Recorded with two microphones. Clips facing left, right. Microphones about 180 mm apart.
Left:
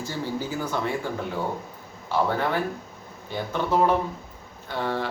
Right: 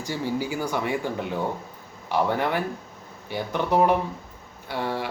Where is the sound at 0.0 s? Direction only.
15° right (ahead or behind).